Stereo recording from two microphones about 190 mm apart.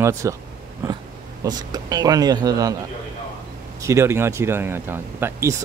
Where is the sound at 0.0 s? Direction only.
15° right (ahead or behind).